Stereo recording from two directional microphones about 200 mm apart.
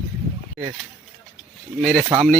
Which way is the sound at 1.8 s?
Centre (ahead or behind).